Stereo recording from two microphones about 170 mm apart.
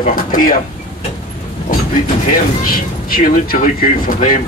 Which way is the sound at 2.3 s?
60° left (ahead or behind).